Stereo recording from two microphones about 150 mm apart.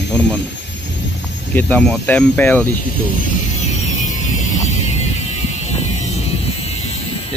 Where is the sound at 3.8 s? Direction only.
55° left (ahead or behind).